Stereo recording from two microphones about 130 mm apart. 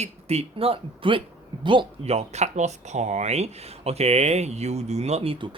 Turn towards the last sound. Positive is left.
turn(degrees=-55)  # may be behind; listen again after turning